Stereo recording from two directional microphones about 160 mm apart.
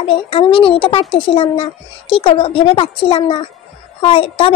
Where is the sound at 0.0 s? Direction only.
35° left (ahead or behind).